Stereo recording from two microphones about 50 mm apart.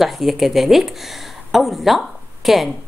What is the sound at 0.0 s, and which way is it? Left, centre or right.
Speech, centre.